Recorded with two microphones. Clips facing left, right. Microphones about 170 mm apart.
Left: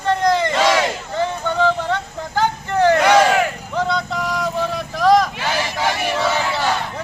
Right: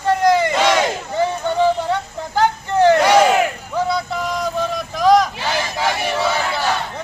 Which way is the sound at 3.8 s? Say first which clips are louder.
Right 1 dB; 10° right (ahead or behind).